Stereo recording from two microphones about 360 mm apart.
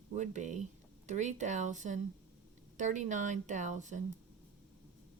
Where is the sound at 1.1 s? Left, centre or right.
Centre.